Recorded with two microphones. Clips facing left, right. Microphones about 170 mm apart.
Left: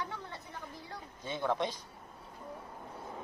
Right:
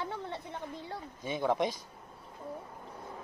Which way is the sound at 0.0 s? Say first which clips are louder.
Right 4 dB; 25° right (ahead or behind).